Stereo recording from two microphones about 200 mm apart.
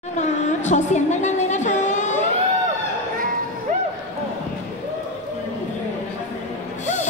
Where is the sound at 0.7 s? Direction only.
35° left (ahead or behind).